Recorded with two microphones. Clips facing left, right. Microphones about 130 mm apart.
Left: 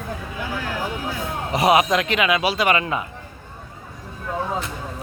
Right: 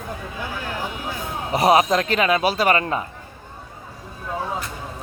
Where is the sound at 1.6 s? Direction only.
35° right (ahead or behind).